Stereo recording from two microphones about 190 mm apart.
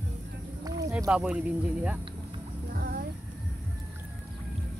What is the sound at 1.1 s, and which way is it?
Speech, 5° right (ahead or behind).